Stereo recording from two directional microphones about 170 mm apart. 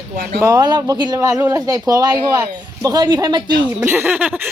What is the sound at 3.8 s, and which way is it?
Speech, 15° right (ahead or behind).